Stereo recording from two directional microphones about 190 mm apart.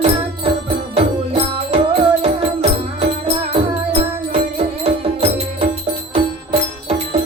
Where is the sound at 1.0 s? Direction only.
30° right (ahead or behind).